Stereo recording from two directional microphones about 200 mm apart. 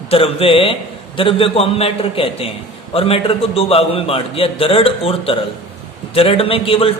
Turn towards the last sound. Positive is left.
turn(degrees=25)  # may be behind; listen again after turning